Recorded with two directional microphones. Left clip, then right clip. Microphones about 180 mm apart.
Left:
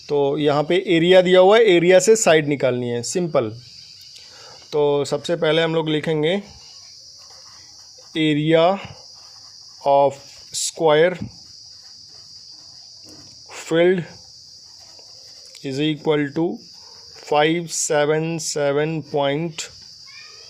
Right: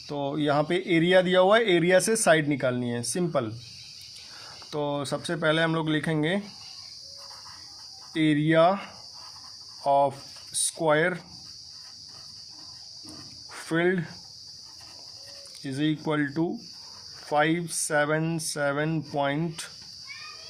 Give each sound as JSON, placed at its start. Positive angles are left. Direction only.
{"t": 0.1, "sound": "speech", "side_deg": 30}
{"t": 4.7, "sound": "speech", "side_deg": 30}
{"t": 8.1, "sound": "speech", "side_deg": 30}
{"t": 13.5, "sound": "speech", "side_deg": 30}
{"t": 15.6, "sound": "speech", "side_deg": 35}